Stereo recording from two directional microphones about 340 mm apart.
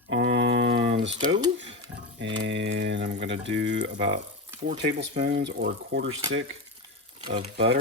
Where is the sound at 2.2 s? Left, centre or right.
Right.